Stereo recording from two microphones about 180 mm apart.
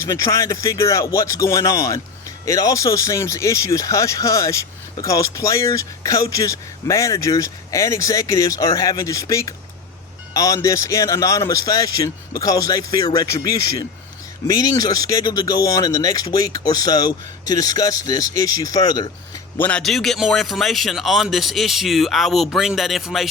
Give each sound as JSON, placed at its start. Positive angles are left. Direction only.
{"t": 0.0, "sound": "speech", "side_deg": 15}
{"t": 19.5, "sound": "a man's voice", "side_deg": 10}